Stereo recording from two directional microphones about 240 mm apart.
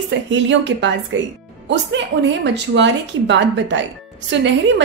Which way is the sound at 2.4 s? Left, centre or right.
Right.